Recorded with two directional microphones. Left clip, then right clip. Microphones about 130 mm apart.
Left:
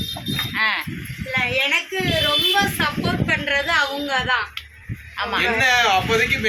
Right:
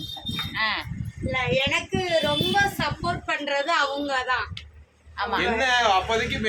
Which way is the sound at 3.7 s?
Centre (ahead or behind).